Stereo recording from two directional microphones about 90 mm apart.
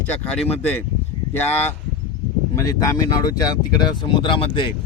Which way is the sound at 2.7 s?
40° left (ahead or behind).